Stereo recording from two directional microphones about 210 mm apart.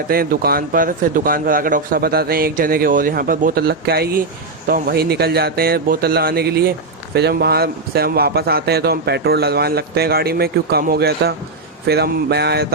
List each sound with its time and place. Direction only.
0.1 s speech: 45° right (ahead or behind)